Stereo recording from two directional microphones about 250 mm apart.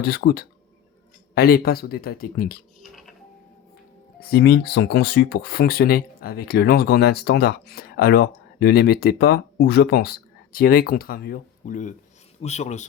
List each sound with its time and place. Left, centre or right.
0.0 s speech: left
4.2 s speech: left